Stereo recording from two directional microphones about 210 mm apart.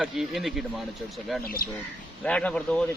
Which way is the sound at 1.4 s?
45° left (ahead or behind).